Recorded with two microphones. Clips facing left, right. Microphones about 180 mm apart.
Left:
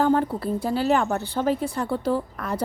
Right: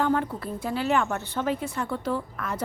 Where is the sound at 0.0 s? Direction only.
35° left (ahead or behind).